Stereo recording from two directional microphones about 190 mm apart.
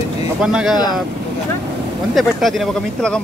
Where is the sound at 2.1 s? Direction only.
Centre (ahead or behind).